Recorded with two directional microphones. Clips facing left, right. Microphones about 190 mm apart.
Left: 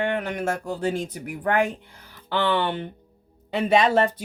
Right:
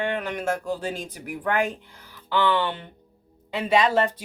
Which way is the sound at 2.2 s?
50° left (ahead or behind).